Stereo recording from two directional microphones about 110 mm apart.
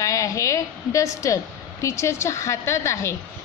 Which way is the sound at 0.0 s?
30° left (ahead or behind).